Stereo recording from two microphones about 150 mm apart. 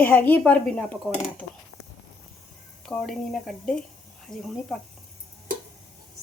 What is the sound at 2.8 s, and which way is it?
Speech, 5° left (ahead or behind).